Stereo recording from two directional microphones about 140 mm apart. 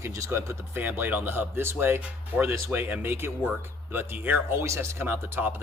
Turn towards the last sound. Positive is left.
turn(degrees=-15)  # may be behind; listen again after turning